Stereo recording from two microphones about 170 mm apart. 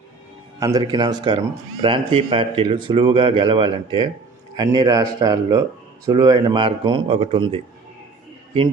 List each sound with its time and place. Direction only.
0.6 s speech: 25° right (ahead or behind)